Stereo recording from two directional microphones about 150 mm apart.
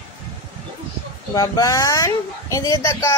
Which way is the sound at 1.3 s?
25° left (ahead or behind).